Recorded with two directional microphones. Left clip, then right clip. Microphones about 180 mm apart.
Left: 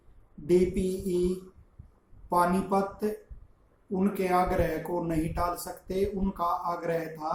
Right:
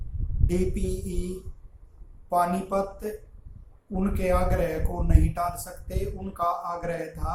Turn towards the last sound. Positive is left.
turn(degrees=-15)  # may be behind; listen again after turning